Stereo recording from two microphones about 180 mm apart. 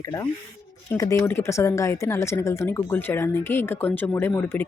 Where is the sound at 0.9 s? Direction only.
15° left (ahead or behind).